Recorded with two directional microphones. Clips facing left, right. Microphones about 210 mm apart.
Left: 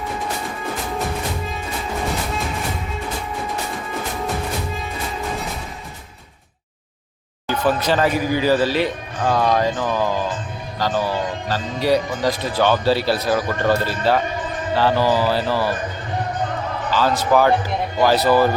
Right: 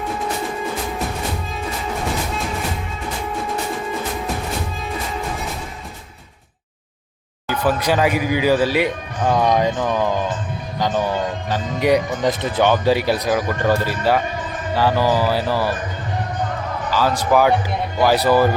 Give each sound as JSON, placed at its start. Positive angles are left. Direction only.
{"t": 7.4, "sound": "speech", "side_deg": -10}
{"t": 11.0, "sound": "speech", "side_deg": -15}
{"t": 16.9, "sound": "speech", "side_deg": -10}